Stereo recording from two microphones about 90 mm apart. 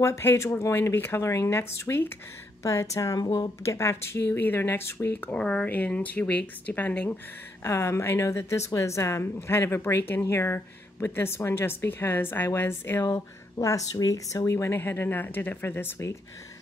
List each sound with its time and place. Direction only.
0.0 s a woman's voice: 30° left (ahead or behind); by 3.4 s 45° left (ahead or behind)
3.6 s a woman's voice: 30° left (ahead or behind)
5.3 s speech: 10° left (ahead or behind)
7.6 s a woman's voice: 30° left (ahead or behind)
13.0 s a woman's voice: 40° left (ahead or behind)